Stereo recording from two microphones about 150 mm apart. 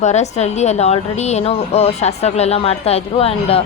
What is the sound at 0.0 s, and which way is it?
A woman's voice, 50° left (ahead or behind).